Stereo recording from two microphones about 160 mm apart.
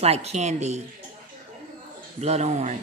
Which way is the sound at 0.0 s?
40° right (ahead or behind).